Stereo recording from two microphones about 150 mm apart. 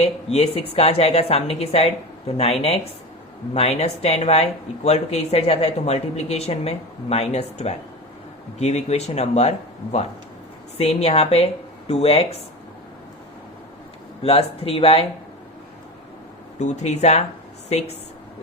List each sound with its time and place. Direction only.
0.0 s speech: 45° left (ahead or behind)
14.2 s speech: 40° left (ahead or behind)
16.6 s a woman's voice: 50° left (ahead or behind)